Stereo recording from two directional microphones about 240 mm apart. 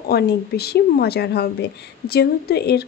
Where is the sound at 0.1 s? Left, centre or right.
Left.